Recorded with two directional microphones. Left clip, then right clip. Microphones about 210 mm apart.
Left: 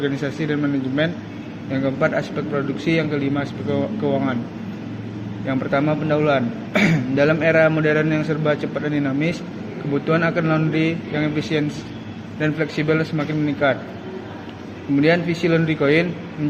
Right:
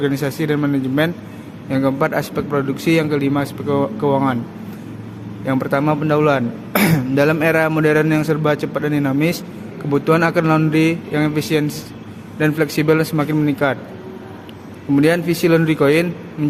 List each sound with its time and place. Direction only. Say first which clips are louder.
0.0 s a man's voice: right 4 dB; 45° right (ahead or behind)
5.5 s a man's voice: right 3 dB; 50° right (ahead or behind)
15.0 s a man's voice: right 2 dB; 50° right (ahead or behind)